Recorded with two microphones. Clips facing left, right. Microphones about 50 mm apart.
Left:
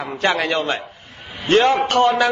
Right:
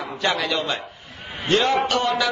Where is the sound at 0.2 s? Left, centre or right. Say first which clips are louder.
Left 4 dB; left.